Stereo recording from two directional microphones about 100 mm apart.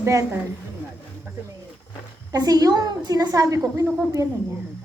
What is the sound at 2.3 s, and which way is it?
A woman's voice, 40° right (ahead or behind).